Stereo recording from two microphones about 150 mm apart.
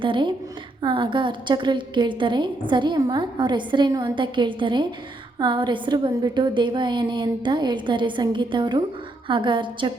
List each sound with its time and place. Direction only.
0.0 s a woman's voice: 30° right (ahead or behind)